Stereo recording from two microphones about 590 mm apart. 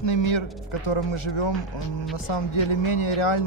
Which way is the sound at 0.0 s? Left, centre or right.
Left.